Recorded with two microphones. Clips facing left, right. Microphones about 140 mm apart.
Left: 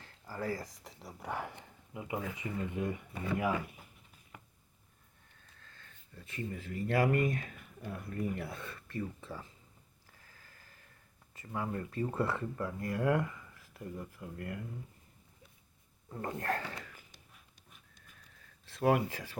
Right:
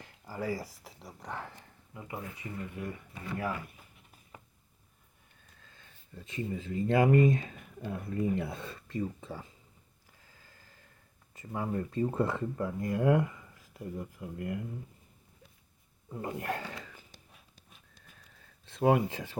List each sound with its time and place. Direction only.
0.0 s speech: 15° right (ahead or behind)
1.3 s speech: 15° left (ahead or behind)
2.2 s speech: 90° left
2.6 s speech: 20° left (ahead or behind)
5.6 s speech: 15° right (ahead or behind)
11.3 s speech: 25° right (ahead or behind)
16.1 s speech: 10° right (ahead or behind)
18.6 s speech: 20° right (ahead or behind)